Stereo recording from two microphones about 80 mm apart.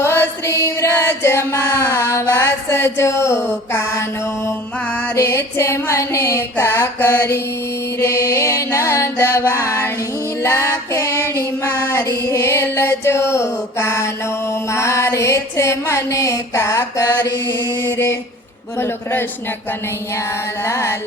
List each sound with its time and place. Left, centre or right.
0.0 s music: left
2.3 s a sound: left
5.1 s music: left
10.4 s female singing: left
11.9 s music: left
20.7 s music: left